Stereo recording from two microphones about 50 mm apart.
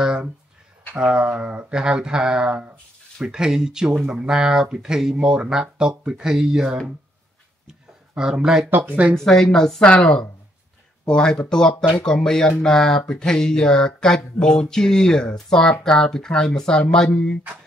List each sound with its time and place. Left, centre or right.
0.0 s a sound: centre
0.9 s speech: right
8.2 s speech: centre
8.6 s speech: right
9.1 s speech: centre
11.1 s speech: centre